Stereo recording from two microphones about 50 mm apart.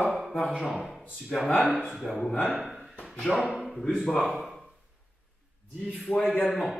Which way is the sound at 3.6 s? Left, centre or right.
Centre.